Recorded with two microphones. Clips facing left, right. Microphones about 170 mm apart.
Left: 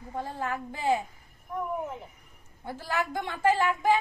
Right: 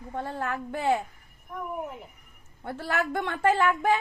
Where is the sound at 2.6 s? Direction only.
65° right (ahead or behind).